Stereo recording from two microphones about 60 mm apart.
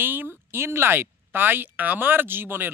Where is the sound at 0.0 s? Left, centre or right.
Right.